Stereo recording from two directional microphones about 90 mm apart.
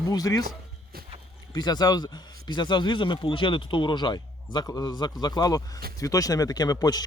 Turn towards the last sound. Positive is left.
turn(degrees=45)  # may be behind; listen again after turning